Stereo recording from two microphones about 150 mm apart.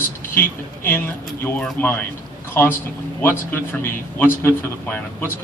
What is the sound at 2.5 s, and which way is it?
A man's voice, 15° left (ahead or behind).